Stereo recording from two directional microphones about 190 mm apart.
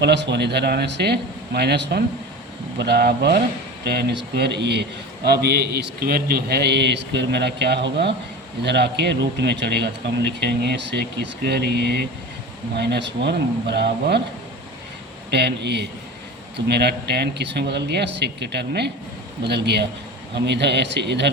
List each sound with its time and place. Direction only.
0.0 s a man's voice: 65° right (ahead or behind)
15.3 s a man's voice: 65° right (ahead or behind)